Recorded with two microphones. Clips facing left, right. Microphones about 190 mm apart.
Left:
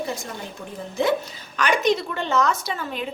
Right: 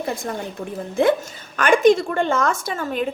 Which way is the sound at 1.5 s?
50° right (ahead or behind).